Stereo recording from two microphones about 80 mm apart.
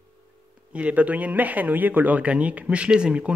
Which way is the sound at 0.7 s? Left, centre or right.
Centre.